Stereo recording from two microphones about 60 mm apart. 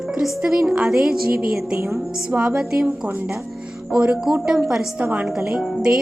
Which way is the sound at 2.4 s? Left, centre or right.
Centre.